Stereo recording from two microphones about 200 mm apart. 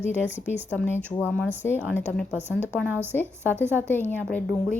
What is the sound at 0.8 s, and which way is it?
Speech, 10° left (ahead or behind).